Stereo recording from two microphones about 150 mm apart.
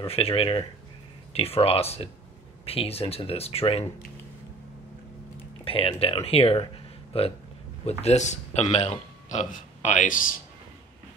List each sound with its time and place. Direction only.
0.0 s speech: 40° left (ahead or behind)
5.7 s speech: 40° left (ahead or behind); by 10.4 s 65° left (ahead or behind)